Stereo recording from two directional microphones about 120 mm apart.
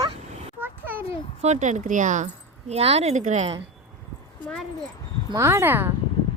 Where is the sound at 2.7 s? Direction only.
60° right (ahead or behind); by 3.5 s 75° right (ahead or behind).